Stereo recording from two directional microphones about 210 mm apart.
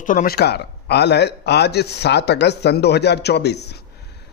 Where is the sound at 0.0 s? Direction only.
40° left (ahead or behind).